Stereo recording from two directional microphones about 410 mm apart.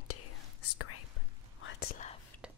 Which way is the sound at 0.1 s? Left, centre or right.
Left.